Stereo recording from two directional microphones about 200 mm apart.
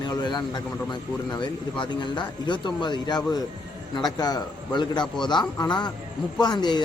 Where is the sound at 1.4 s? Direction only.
25° left (ahead or behind).